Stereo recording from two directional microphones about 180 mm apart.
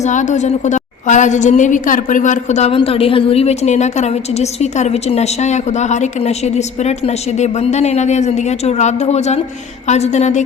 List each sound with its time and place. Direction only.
0.0 s a woman's voice: 40° left (ahead or behind)